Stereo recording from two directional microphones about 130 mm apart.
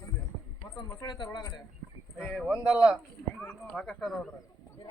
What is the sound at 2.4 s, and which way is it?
Speech, 5° right (ahead or behind).